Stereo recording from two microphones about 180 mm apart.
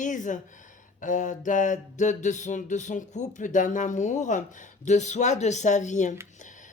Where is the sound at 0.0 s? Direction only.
45° left (ahead or behind).